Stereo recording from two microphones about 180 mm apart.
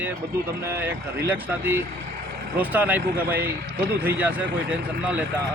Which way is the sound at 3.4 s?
60° right (ahead or behind).